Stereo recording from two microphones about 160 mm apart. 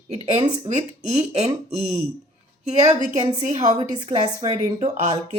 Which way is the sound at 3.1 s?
45° right (ahead or behind).